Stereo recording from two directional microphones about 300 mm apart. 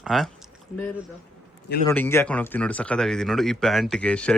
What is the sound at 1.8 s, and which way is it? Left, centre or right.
Speech, centre.